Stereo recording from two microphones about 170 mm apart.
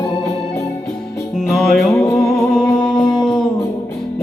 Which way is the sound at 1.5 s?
Centre (ahead or behind).